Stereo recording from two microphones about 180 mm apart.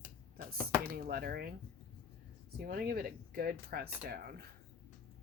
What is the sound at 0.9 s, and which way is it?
Speech, 55° right (ahead or behind).